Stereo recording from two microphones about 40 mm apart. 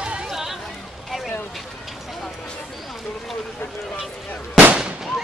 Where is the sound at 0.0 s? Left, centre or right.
Right.